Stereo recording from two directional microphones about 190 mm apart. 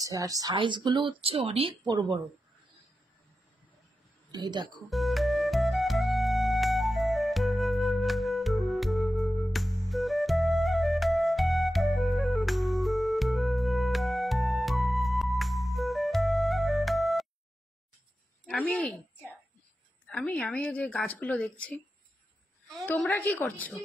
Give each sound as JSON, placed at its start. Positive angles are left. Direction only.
{"t": 0.0, "sound": "speech", "side_deg": -20}
{"t": 4.3, "sound": "speech", "side_deg": -25}
{"t": 4.8, "sound": "music", "side_deg": 0}
{"t": 18.5, "sound": "a woman's voice", "side_deg": 5}
{"t": 20.1, "sound": "speech", "side_deg": 5}
{"t": 22.8, "sound": "a woman's voice", "side_deg": 10}